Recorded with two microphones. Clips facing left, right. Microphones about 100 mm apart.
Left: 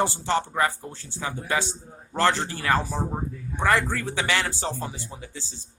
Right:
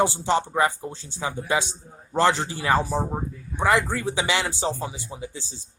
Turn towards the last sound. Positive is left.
turn(degrees=-15)  # may be behind; listen again after turning